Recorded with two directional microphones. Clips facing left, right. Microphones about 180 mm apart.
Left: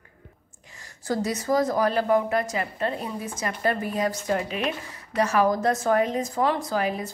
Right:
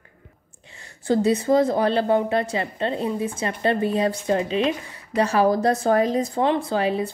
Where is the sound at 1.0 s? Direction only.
30° right (ahead or behind).